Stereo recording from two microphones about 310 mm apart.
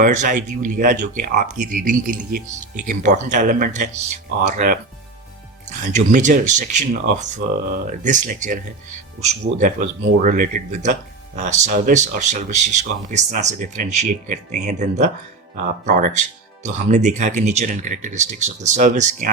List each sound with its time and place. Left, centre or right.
0.0 s speech: right
5.8 s speech: right